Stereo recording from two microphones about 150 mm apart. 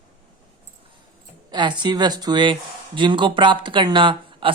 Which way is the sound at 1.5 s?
30° right (ahead or behind).